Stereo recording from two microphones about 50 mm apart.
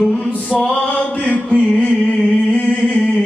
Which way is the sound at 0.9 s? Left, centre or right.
Left.